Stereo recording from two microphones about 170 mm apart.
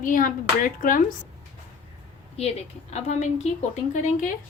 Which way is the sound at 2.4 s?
40° left (ahead or behind).